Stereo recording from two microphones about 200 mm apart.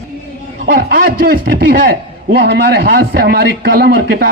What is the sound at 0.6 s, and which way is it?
A man's voice, 50° right (ahead or behind).